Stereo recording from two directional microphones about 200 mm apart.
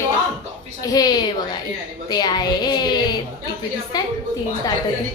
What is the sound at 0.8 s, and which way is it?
Speech, 20° left (ahead or behind).